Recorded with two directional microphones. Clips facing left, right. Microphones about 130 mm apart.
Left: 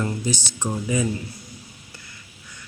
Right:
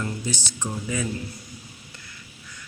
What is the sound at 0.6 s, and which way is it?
Speech, 20° left (ahead or behind).